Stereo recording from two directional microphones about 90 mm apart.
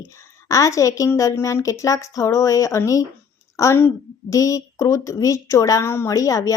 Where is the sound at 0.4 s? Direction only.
40° left (ahead or behind).